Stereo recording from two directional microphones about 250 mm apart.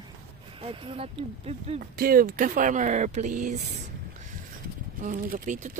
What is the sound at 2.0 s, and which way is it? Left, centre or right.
Speech, right.